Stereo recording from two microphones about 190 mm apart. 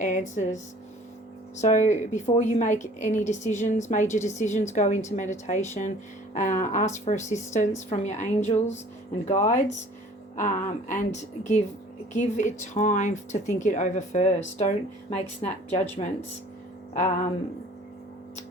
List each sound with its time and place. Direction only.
0.0 s a woman's voice: 40° left (ahead or behind)
1.6 s a woman's voice: 40° left (ahead or behind)